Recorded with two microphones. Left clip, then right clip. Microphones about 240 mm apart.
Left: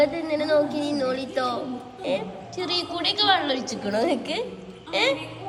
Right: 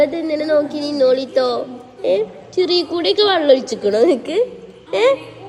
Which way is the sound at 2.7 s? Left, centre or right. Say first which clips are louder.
Right 6 dB; left.